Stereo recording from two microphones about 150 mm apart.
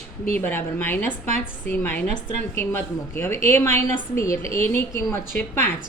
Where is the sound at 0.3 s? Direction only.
15° left (ahead or behind).